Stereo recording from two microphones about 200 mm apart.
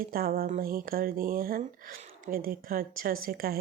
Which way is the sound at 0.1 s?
50° right (ahead or behind).